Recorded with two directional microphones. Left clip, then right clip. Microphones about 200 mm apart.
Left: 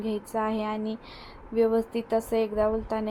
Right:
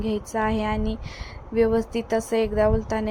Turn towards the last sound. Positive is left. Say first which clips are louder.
# right 4 dB
turn(degrees=-20)  # may be behind; listen again after turning